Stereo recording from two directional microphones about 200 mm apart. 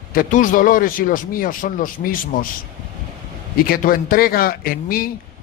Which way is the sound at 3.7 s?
45° left (ahead or behind).